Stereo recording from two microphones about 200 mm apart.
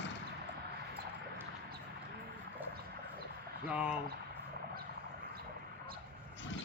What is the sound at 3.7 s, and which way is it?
Speech, 5° right (ahead or behind).